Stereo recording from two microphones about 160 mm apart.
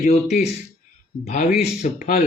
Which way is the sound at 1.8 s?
65° left (ahead or behind).